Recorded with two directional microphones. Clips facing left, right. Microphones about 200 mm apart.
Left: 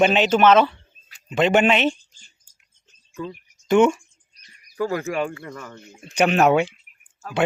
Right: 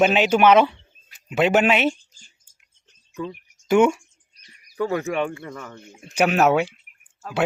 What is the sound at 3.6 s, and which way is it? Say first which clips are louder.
A man's voice: left 1 dB; 10° right (ahead or behind).